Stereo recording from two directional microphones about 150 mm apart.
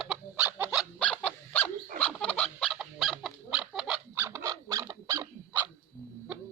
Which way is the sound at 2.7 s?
Centre (ahead or behind).